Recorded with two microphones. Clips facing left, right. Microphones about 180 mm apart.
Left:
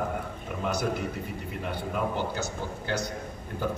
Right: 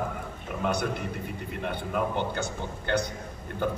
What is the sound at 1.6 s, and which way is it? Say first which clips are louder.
Speech: right 1 dB; 60° right (ahead or behind).